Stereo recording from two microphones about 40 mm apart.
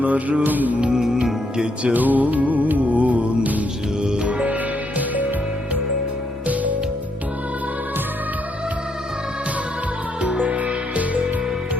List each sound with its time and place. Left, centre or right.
0.0 s mantra: right
0.9 s music: centre
1.9 s music: right
4.0 s music: right
4.3 s music: right
6.5 s music: right
10.2 s music: right